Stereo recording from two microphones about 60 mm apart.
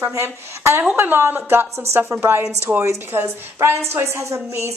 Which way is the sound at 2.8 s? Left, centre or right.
Right.